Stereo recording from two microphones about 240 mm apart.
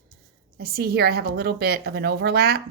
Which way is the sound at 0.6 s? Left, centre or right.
Right.